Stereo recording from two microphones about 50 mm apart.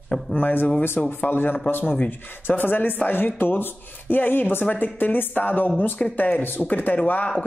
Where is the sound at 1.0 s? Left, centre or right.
Left.